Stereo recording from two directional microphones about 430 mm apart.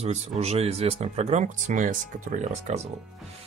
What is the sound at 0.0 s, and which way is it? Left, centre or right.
Speech, centre.